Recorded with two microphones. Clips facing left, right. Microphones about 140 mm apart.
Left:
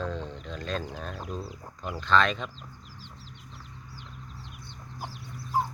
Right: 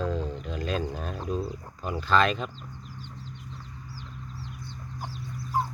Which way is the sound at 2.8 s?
90° left.